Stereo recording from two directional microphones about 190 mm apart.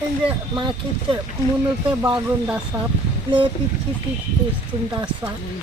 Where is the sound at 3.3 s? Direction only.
25° right (ahead or behind).